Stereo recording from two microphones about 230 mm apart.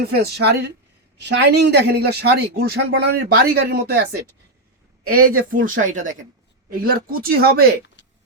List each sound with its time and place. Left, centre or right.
0.0 s speech: right
5.3 s speech: right
8.0 s a sound: left